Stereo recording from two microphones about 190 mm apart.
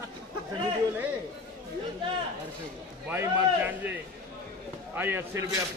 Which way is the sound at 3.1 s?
10° right (ahead or behind).